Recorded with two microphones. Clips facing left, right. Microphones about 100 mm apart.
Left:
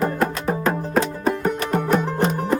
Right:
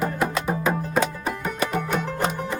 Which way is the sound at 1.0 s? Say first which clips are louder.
Left 4 dB; 35° left (ahead or behind).